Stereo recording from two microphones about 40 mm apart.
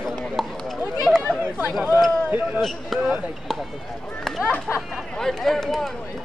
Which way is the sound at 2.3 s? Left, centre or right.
Right.